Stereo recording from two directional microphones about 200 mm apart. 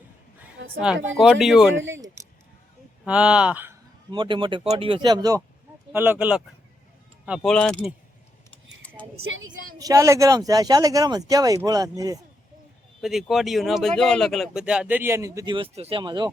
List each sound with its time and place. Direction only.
0.6 s a sound: 70° right (ahead or behind)
1.1 s speech: centre (ahead or behind)
1.7 s speech: 70° right (ahead or behind)
3.0 s speech: 5° right (ahead or behind)
4.1 s speech: 25° right (ahead or behind); by 7.9 s 5° left (ahead or behind)
9.1 s a woman's voice: 85° right
9.7 s speech: 15° right (ahead or behind)
13.0 s speech: centre (ahead or behind); by 16.3 s 20° right (ahead or behind)